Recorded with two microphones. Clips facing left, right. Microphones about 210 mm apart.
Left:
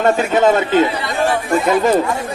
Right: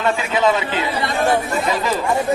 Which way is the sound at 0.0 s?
45° left (ahead or behind).